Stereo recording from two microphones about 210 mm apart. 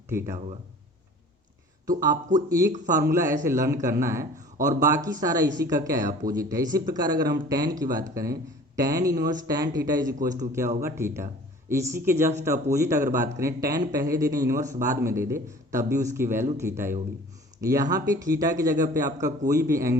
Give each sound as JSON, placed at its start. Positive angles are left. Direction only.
{"t": 0.1, "sound": "speech", "side_deg": -10}
{"t": 2.5, "sound": "speech", "side_deg": -15}